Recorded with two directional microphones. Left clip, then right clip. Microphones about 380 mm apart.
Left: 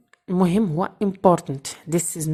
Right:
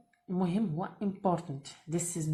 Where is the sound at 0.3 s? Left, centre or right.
Left.